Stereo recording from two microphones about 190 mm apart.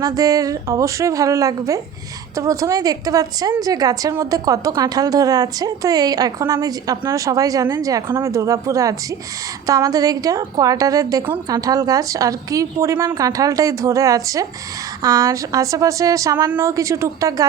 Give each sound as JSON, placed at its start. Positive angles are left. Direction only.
{"t": 0.0, "sound": "a woman's voice", "side_deg": -20}